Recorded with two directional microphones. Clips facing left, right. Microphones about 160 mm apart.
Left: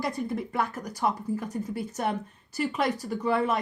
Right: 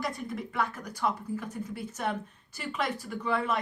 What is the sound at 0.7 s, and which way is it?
A woman's voice, 40° left (ahead or behind).